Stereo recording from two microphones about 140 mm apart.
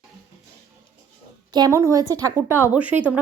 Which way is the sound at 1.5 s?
25° right (ahead or behind).